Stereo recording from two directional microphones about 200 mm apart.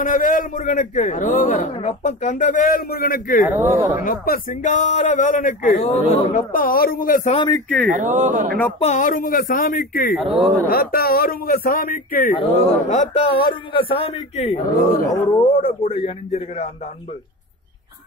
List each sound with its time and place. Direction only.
0.0 s a man's voice: 40° left (ahead or behind)
3.4 s speech: 10° right (ahead or behind)
4.0 s a man's voice: 45° left (ahead or behind)
7.4 s speech: 15° left (ahead or behind)
7.9 s speech: 40° right (ahead or behind)
8.7 s speech: 35° left (ahead or behind)
10.1 s speech: centre (ahead or behind)
10.7 s speech: 50° left (ahead or behind)
12.4 s a man's voice: 35° left (ahead or behind)